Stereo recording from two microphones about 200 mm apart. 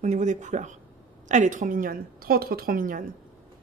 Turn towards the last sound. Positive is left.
turn(degrees=-45)  # may be behind; listen again after turning